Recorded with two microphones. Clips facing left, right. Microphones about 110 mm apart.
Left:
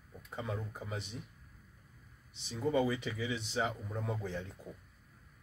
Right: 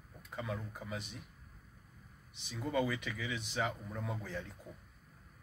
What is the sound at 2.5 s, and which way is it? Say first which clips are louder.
A man's voice: left 3 dB; 25° left (ahead or behind).